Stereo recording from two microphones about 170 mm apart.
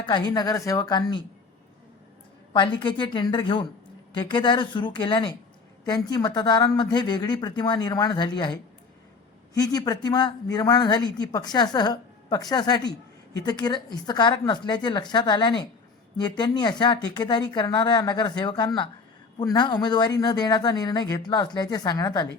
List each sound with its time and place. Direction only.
0.0 s speech: 25° left (ahead or behind)
2.5 s speech: 30° left (ahead or behind)
9.6 s speech: 25° left (ahead or behind)